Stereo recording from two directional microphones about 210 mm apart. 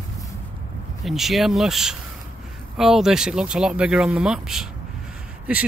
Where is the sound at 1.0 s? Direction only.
Centre (ahead or behind).